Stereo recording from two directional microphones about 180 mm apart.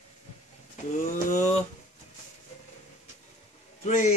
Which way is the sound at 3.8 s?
40° left (ahead or behind).